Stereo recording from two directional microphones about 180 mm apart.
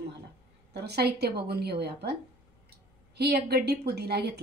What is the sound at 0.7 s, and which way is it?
A woman's voice, 65° right (ahead or behind).